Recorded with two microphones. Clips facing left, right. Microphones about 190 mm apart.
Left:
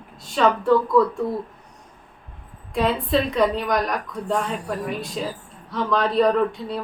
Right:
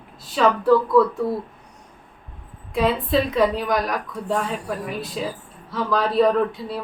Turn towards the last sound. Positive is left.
turn(degrees=0)  # may be behind; listen again after turning